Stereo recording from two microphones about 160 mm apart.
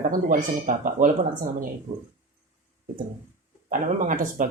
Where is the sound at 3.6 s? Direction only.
55° right (ahead or behind).